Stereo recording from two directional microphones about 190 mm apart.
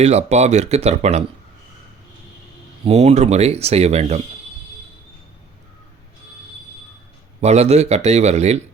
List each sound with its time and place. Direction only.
0.0 s speech: 35° right (ahead or behind)
2.8 s speech: 35° right (ahead or behind)
7.4 s speech: 35° right (ahead or behind)